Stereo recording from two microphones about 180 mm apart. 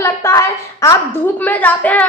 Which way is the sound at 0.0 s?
15° left (ahead or behind).